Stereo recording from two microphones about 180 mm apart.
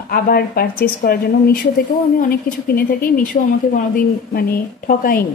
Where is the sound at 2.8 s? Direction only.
50° left (ahead or behind).